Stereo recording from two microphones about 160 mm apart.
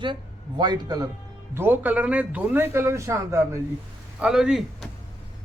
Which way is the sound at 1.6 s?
15° right (ahead or behind).